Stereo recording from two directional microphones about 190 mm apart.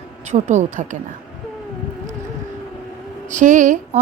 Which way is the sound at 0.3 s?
35° right (ahead or behind).